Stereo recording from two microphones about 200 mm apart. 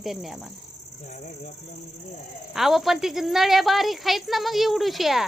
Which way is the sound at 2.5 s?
Centre (ahead or behind).